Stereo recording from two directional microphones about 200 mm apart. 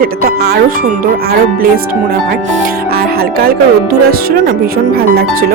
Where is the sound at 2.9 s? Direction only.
50° right (ahead or behind).